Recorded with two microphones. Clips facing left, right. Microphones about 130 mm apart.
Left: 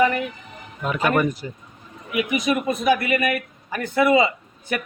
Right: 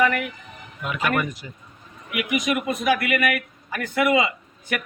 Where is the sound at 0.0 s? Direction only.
25° left (ahead or behind).